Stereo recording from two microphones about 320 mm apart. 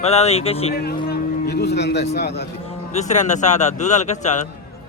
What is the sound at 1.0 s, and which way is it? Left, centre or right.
A man's voice, left.